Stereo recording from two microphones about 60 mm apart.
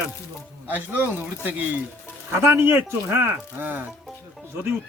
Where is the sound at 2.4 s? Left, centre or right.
Right.